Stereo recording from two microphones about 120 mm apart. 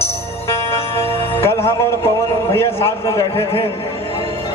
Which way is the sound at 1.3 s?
20° left (ahead or behind).